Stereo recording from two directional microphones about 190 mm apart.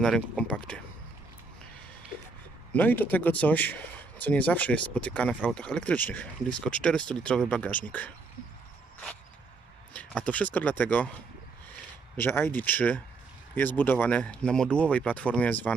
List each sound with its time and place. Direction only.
0.0 s speech: 5° left (ahead or behind)
2.7 s speech: 10° left (ahead or behind)
5.3 s speech: 5° right (ahead or behind)
5.5 s speech: 5° left (ahead or behind)
9.9 s speech: 5° left (ahead or behind)
12.1 s speech: 10° left (ahead or behind)